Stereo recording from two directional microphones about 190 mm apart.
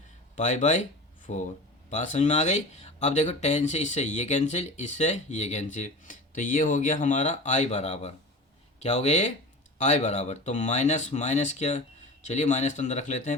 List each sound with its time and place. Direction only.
0.3 s speech: 40° left (ahead or behind)